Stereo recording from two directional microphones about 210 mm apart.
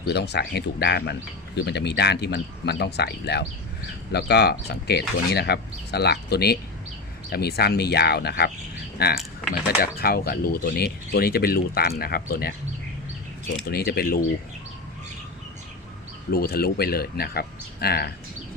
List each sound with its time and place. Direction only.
0.1 s speech: 50° left (ahead or behind)
13.7 s speech: 45° left (ahead or behind)
16.3 s speech: 45° left (ahead or behind)